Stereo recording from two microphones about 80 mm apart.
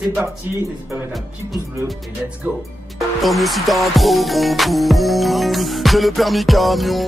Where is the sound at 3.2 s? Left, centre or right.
Centre.